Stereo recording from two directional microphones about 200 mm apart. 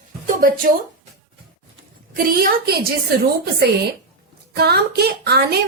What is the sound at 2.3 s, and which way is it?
Speech, 50° right (ahead or behind).